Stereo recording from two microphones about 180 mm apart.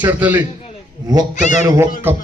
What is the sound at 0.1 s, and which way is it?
Speech, 10° right (ahead or behind).